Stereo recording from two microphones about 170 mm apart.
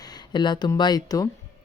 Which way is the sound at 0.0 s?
25° left (ahead or behind).